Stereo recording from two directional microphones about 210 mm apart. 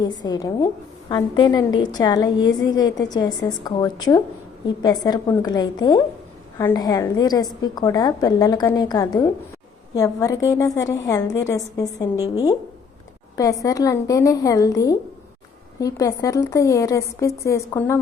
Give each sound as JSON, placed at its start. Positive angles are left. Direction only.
{"t": 0.3, "sound": "a woman's voice", "side_deg": 20}